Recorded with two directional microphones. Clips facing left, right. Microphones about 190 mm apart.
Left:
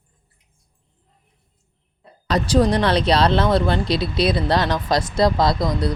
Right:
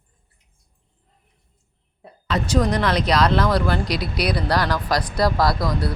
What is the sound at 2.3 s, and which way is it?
Speech, 35° left (ahead or behind).